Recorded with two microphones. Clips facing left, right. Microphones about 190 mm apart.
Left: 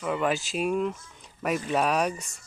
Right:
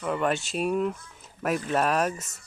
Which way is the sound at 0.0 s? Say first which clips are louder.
Even; centre (ahead or behind).